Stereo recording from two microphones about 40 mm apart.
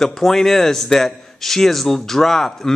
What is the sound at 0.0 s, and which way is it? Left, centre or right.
A man's voice, centre.